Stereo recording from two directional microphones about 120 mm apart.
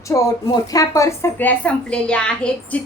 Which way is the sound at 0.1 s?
30° left (ahead or behind).